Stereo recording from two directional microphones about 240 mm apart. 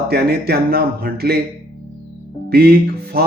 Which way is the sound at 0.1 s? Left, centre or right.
Right.